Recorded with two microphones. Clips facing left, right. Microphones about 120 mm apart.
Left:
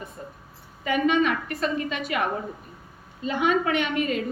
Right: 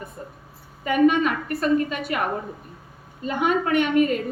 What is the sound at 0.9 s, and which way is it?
A woman's voice, 45° right (ahead or behind).